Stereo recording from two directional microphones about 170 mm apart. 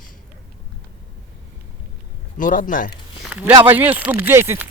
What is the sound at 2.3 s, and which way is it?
Speech, 50° left (ahead or behind).